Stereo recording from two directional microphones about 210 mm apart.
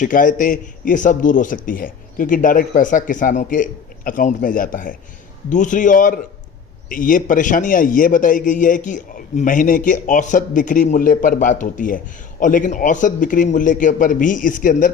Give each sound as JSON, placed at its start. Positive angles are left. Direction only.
{"t": 0.0, "sound": "a man's voice", "side_deg": 40}